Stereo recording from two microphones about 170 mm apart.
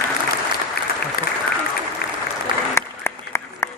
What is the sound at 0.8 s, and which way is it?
Applause, 70° left (ahead or behind).